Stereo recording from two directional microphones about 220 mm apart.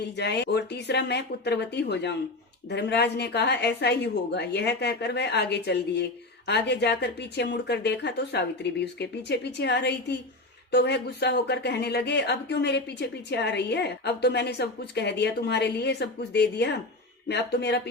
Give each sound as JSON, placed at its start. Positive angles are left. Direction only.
{"t": 0.0, "sound": "speech", "side_deg": 50}